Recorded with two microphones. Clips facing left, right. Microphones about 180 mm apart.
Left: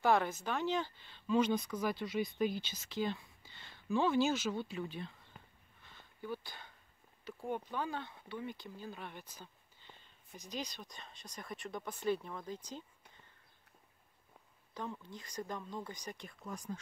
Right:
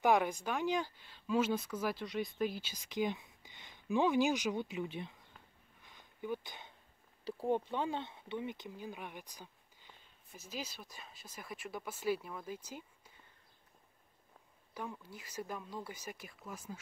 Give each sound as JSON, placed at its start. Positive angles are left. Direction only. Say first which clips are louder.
{"t": 0.0, "sound": "speech", "louder": "right 1 dB", "side_deg": -15}
{"t": 5.8, "sound": "a sound", "louder": "right 3 dB", "side_deg": -15}
{"t": 7.2, "sound": "speech", "louder": "right 6 dB", "side_deg": -30}
{"t": 14.7, "sound": "speech", "louder": "left 1 dB", "side_deg": -10}